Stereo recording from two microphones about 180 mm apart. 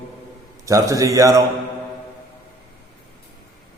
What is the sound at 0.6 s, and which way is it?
Speech, 15° right (ahead or behind).